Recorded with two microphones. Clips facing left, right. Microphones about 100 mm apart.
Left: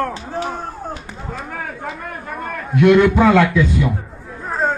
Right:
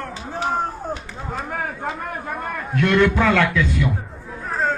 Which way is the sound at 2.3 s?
Centre (ahead or behind).